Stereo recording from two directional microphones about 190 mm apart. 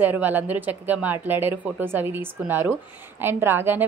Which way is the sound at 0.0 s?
10° right (ahead or behind).